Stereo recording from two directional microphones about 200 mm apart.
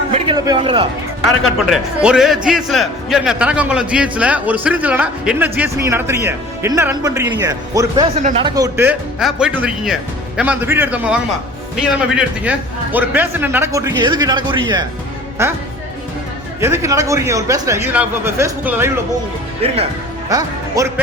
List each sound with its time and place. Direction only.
0.1 s a sound: 20° right (ahead or behind)
1.7 s a man's voice: 5° right (ahead or behind)
8.1 s speech: 35° right (ahead or behind)
8.4 s a man's voice: 20° right (ahead or behind)
16.6 s a man's voice: 15° right (ahead or behind)
19.6 s speech: 30° right (ahead or behind)
20.8 s a man's voice: 15° right (ahead or behind)